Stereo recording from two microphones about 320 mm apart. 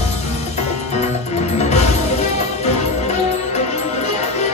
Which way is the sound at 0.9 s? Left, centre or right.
Centre.